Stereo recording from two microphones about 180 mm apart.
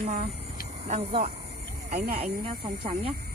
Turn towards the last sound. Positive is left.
turn(degrees=-30)  # may be behind; listen again after turning